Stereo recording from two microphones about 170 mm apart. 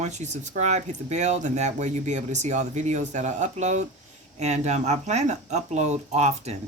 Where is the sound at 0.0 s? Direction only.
45° right (ahead or behind).